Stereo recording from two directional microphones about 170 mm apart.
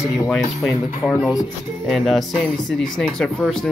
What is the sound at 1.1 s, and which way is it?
Speech, 20° left (ahead or behind).